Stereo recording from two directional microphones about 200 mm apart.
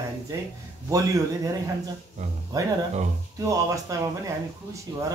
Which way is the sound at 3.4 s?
15° right (ahead or behind).